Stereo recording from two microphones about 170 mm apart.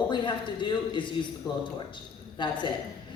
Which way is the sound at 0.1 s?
25° left (ahead or behind).